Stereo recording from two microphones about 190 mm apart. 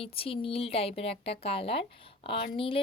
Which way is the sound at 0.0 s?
30° left (ahead or behind).